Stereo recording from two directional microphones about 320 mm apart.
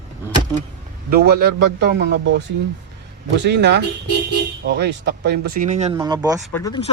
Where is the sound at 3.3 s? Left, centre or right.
Right; by 6.3 s centre.